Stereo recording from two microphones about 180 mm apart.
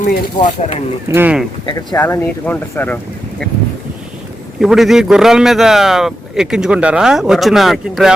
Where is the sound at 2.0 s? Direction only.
10° left (ahead or behind).